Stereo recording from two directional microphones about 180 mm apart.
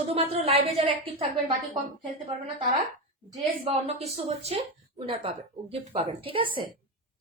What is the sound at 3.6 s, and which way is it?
A woman's voice, 35° right (ahead or behind).